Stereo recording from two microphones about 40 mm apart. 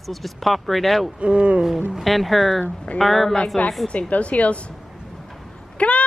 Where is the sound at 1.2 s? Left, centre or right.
Right.